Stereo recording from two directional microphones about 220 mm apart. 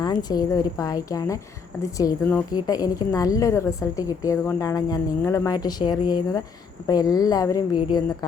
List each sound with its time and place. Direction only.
0.0 s a woman's voice: 20° left (ahead or behind)